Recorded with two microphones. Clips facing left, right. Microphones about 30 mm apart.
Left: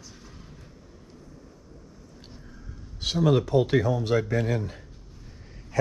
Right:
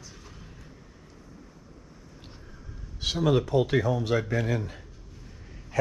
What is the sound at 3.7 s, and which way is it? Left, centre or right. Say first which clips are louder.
Speech: left 2 dB; right.